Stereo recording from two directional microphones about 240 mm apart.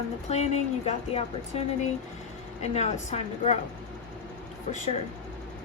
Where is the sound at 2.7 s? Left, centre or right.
Left.